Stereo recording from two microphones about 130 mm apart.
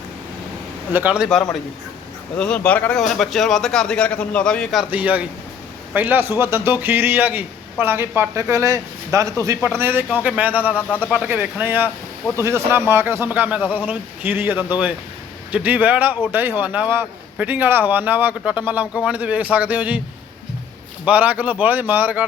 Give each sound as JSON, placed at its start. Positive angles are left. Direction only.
{"t": 0.9, "sound": "speech", "side_deg": -10}
{"t": 2.4, "sound": "a man's voice", "side_deg": 10}
{"t": 4.9, "sound": "speech", "side_deg": -10}
{"t": 10.7, "sound": "speech", "side_deg": 15}
{"t": 11.0, "sound": "speech", "side_deg": -15}
{"t": 21.0, "sound": "speech", "side_deg": -10}